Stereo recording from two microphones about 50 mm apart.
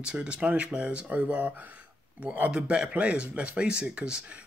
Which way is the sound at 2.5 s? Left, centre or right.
Right.